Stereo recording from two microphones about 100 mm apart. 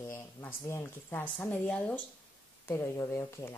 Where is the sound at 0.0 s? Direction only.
20° left (ahead or behind).